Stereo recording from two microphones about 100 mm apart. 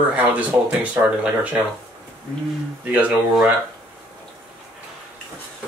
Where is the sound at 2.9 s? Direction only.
15° right (ahead or behind).